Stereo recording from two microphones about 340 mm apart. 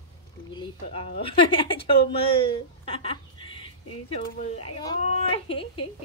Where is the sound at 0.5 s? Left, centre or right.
Centre.